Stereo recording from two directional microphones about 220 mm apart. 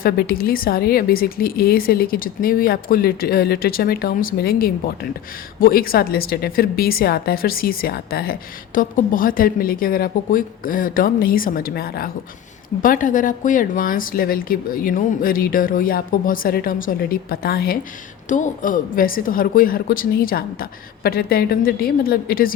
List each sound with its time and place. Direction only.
0.0 s a woman's voice: 45° left (ahead or behind)